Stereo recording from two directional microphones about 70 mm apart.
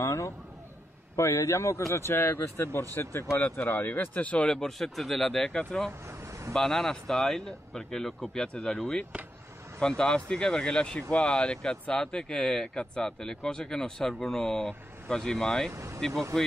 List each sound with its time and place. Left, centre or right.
0.0 s speech: left; by 15.7 s centre
15.7 s speech: right
16.3 s speech: centre